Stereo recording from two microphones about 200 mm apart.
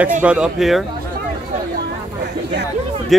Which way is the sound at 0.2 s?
5° right (ahead or behind).